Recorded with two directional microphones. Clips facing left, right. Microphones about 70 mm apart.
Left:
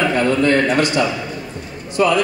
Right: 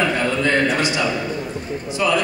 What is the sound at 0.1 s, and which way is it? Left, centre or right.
A man's voice, left.